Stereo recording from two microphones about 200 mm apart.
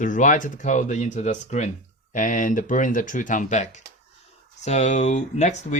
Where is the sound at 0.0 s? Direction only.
40° left (ahead or behind).